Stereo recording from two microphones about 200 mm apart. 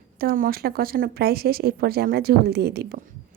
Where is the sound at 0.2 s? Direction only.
45° right (ahead or behind).